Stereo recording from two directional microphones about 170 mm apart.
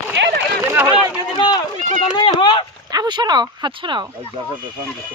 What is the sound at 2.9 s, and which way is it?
Speech, 25° right (ahead or behind).